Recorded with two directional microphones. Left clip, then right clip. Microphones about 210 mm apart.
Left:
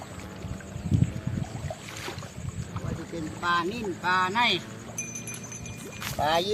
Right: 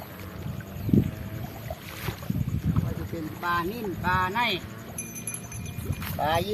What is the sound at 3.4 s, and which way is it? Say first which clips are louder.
Speech: left 1 dB; 35° left (ahead or behind).